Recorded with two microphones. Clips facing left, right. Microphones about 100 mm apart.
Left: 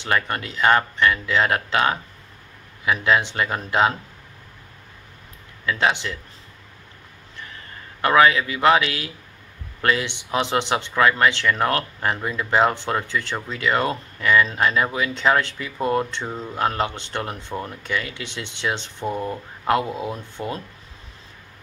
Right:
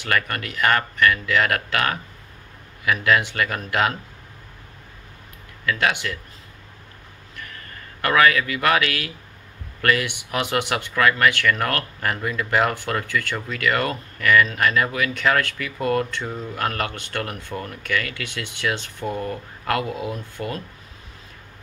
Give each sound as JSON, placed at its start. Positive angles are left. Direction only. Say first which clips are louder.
{"t": 0.0, "sound": "speech", "louder": "left 1 dB", "side_deg": 25}
{"t": 5.7, "sound": "speech", "louder": "left 1 dB", "side_deg": 25}
{"t": 8.0, "sound": "speech", "louder": "left 2 dB", "side_deg": 25}